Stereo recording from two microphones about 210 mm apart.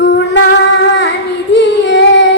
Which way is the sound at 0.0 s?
55° left (ahead or behind).